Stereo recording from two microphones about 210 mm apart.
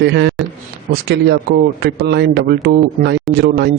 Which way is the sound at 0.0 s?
55° right (ahead or behind).